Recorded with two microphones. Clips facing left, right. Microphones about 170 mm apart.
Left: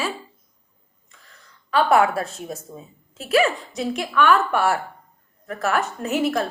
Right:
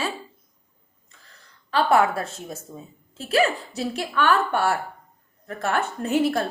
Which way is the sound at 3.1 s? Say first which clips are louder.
Left 2 dB; 30° right (ahead or behind).